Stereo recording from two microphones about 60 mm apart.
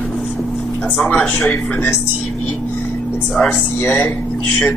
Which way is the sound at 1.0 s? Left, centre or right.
Left.